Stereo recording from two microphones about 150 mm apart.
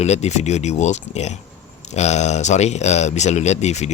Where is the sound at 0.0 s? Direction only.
45° left (ahead or behind).